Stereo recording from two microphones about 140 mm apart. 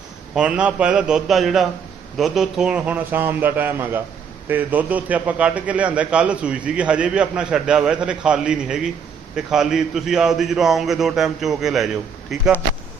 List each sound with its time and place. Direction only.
0.3 s a man's voice: 10° right (ahead or behind)